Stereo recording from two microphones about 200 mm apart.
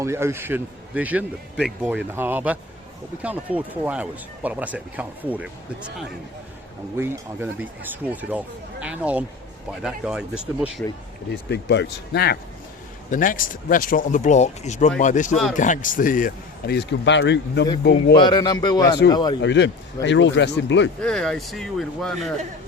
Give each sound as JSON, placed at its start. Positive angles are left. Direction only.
{"t": 0.0, "sound": "speech", "side_deg": -15}
{"t": 6.9, "sound": "speech", "side_deg": -10}
{"t": 11.3, "sound": "speech", "side_deg": 55}
{"t": 13.1, "sound": "speech", "side_deg": 40}
{"t": 18.1, "sound": "speech", "side_deg": 25}
{"t": 19.4, "sound": "speech", "side_deg": 60}
{"t": 21.0, "sound": "speech", "side_deg": 5}